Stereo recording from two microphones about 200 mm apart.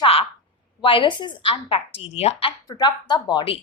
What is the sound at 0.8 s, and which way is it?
A woman's voice, 25° left (ahead or behind).